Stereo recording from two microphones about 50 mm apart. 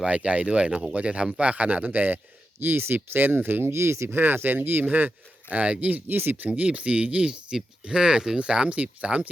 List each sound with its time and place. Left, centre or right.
0.0 s speech: right
4.1 s speech: right
6.1 s speech: right
6.5 s speech: right